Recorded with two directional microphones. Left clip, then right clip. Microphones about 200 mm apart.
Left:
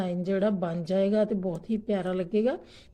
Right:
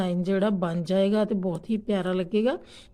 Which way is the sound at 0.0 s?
20° right (ahead or behind).